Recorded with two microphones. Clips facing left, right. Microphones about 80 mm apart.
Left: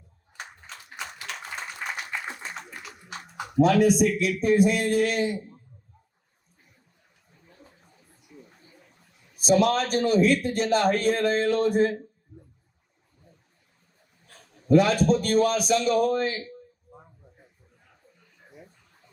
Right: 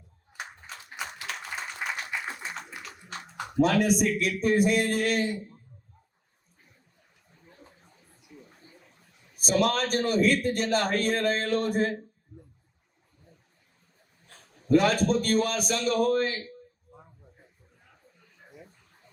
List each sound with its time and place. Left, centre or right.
0.4 s a sound: centre
1.8 s applause: centre
3.4 s a man's voice: right
9.3 s a man's voice: right
14.8 s a man's voice: right